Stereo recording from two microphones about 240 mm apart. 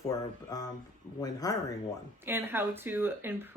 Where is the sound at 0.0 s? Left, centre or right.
Centre.